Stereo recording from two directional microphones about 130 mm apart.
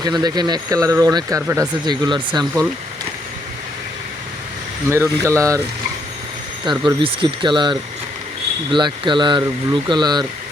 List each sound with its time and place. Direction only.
0.0 s speech: 30° right (ahead or behind)
4.9 s speech: 20° right (ahead or behind)
6.7 s speech: 40° right (ahead or behind)